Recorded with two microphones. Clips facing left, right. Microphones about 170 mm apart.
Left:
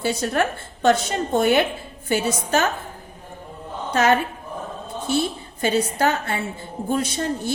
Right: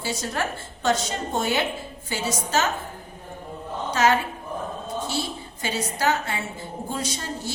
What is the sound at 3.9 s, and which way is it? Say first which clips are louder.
A woman's voice: left 3 dB; 55° left (ahead or behind).